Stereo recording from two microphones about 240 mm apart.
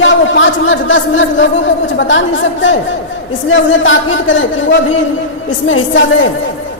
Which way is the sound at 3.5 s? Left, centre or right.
Left.